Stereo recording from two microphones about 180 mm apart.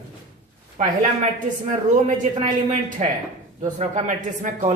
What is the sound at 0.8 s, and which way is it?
A man's voice, 45° right (ahead or behind).